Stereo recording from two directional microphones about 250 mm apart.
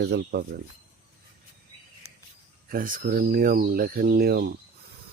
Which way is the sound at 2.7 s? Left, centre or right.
Right.